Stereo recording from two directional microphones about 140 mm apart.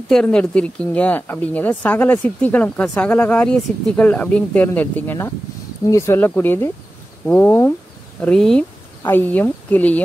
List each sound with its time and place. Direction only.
0.1 s speech: 5° left (ahead or behind)